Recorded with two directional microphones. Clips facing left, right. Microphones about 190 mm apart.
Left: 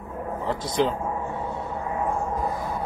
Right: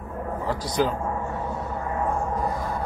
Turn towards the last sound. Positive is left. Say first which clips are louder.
# even
turn(degrees=25)  # may be behind; listen again after turning